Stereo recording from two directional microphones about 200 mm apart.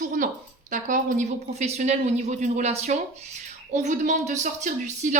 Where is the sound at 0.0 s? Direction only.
40° right (ahead or behind).